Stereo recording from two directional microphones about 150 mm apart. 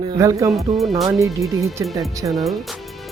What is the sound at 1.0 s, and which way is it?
Speech, 20° right (ahead or behind).